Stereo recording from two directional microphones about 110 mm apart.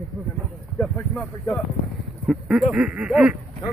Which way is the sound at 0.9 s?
5° left (ahead or behind).